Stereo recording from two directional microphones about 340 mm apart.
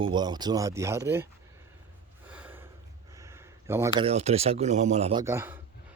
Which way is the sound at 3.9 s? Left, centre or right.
Centre.